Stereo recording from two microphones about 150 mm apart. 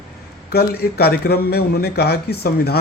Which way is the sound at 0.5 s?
90° left.